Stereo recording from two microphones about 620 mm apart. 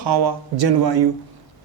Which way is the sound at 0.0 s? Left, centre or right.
Right.